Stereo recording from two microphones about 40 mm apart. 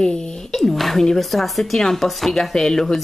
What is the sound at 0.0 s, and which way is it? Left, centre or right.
Speech, left.